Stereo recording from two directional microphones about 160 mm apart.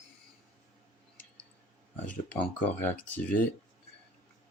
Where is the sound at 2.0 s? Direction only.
10° left (ahead or behind).